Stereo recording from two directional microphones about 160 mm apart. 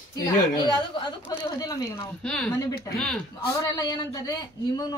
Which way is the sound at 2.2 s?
5° left (ahead or behind).